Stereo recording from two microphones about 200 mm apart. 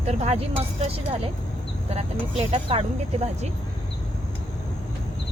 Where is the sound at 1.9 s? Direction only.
30° right (ahead or behind).